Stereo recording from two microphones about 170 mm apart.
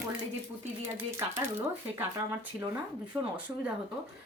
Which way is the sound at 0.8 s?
15° right (ahead or behind).